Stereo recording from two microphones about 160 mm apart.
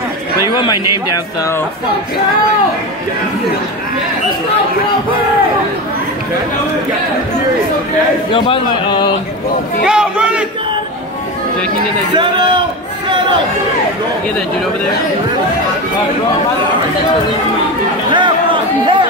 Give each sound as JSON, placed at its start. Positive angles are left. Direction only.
{"t": 0.5, "sound": "speech", "side_deg": 25}
{"t": 8.3, "sound": "speech", "side_deg": 30}
{"t": 9.8, "sound": "a sound", "side_deg": -5}
{"t": 12.2, "sound": "a man's voice", "side_deg": -30}
{"t": 18.1, "sound": "chatter", "side_deg": -30}